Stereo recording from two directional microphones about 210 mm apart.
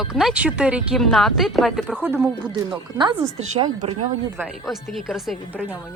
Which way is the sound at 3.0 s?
20° right (ahead or behind).